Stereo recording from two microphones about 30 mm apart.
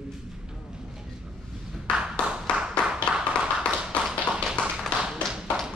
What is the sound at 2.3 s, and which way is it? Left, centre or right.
Clapping, right.